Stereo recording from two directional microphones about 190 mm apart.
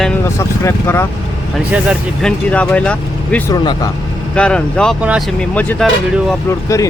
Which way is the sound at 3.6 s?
25° left (ahead or behind).